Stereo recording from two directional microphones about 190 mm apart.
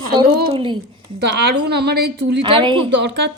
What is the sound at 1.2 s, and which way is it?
A woman's voice, 60° right (ahead or behind).